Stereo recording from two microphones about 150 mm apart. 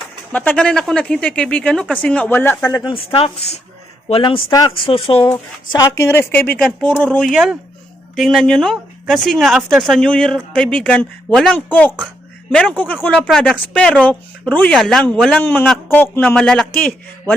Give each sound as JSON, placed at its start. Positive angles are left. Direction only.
{"t": 0.3, "sound": "speech", "side_deg": 10}
{"t": 2.9, "sound": "speech", "side_deg": 35}
{"t": 5.7, "sound": "speech", "side_deg": 20}